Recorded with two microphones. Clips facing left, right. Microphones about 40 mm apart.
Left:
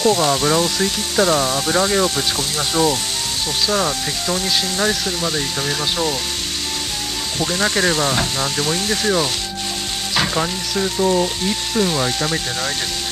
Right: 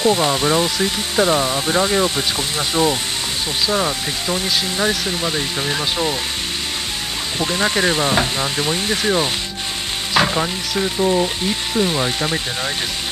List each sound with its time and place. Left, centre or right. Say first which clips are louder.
0.0 s speech: even; right
7.3 s speech: even; centre
10.1 s frying: right 3 dB; centre
10.4 s speech: even; centre